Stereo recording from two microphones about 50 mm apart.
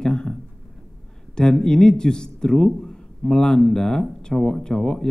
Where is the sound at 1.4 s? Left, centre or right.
Centre.